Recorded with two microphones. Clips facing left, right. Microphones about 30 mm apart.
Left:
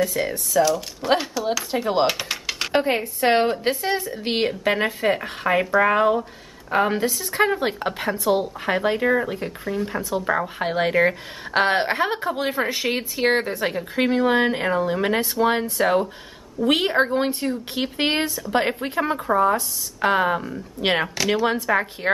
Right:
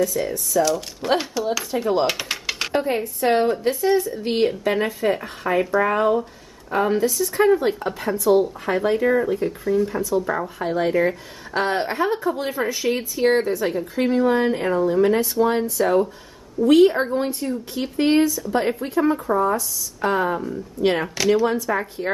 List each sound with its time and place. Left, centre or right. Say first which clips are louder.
0.0 s a woman's voice: right 1 dB; left
0.7 s speech: left 1 dB; centre
1.7 s speech: right 2 dB; left
2.0 s typing: even; centre
2.7 s a woman's voice: left 2 dB; left
4.5 s a woman's voice: even; left
8.2 s speech: right 6 dB; left
10.6 s a woman's voice: even; left
20.8 s a woman's voice: right 2 dB; left